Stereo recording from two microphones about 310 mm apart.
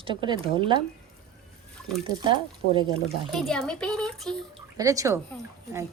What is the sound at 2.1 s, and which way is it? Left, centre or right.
Speech, centre.